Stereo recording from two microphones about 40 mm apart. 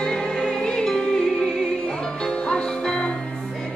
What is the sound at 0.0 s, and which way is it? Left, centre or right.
Music, centre.